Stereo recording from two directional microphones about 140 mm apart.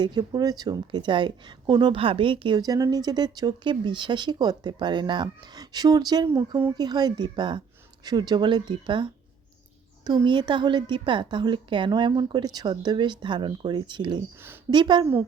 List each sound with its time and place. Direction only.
0.0 s a woman's voice: 30° right (ahead or behind)